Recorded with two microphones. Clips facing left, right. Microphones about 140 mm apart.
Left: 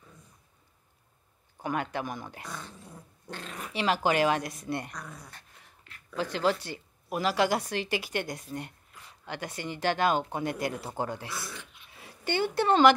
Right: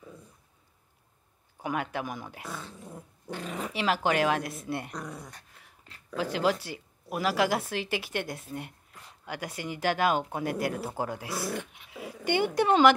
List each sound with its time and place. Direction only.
1.6 s a woman's voice: 5° right (ahead or behind)
3.7 s a woman's voice: centre (ahead or behind)
6.0 s a woman's voice: 10° right (ahead or behind)
11.5 s dog: 75° right (ahead or behind); by 12.3 s 90° right
12.3 s a woman's voice: 15° right (ahead or behind)